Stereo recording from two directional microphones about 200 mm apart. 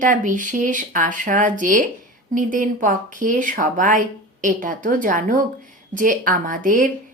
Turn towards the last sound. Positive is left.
turn(degrees=-40)  # may be behind; listen again after turning